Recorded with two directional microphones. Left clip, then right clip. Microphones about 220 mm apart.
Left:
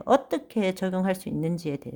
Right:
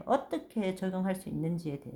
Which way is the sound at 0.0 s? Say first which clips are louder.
Left 8 dB; 40° left (ahead or behind).